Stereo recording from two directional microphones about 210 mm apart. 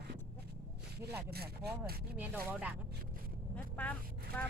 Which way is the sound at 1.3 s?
50° right (ahead or behind).